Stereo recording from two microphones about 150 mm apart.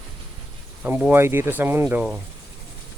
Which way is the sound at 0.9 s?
10° right (ahead or behind).